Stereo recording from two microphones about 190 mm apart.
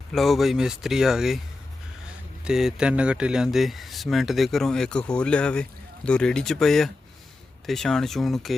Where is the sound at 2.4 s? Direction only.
5° right (ahead or behind).